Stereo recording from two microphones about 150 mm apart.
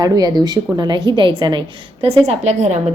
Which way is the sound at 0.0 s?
25° right (ahead or behind).